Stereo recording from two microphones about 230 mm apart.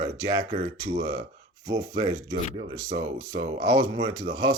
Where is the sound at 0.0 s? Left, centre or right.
Centre.